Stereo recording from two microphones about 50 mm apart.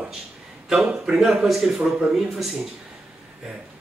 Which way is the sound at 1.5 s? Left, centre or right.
Centre.